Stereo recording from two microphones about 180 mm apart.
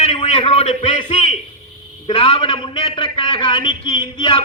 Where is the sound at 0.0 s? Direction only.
35° left (ahead or behind).